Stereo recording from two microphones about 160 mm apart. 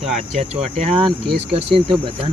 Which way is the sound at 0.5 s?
35° right (ahead or behind).